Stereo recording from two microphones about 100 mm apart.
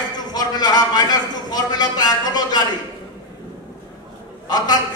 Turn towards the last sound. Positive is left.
turn(degrees=45)  # may be behind; listen again after turning